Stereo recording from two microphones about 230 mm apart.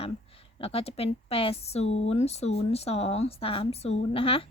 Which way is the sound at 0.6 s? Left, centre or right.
Left.